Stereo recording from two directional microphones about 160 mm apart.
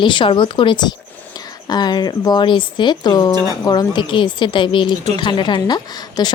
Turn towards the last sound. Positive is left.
turn(degrees=25)  # may be behind; listen again after turning